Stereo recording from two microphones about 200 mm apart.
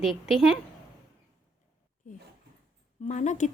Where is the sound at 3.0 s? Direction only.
35° left (ahead or behind).